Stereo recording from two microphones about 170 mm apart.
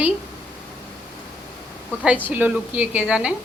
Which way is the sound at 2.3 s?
10° right (ahead or behind).